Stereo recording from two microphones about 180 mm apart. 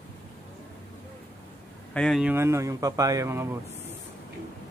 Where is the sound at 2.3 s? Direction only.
15° right (ahead or behind).